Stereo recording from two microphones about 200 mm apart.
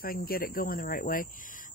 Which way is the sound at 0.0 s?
45° left (ahead or behind).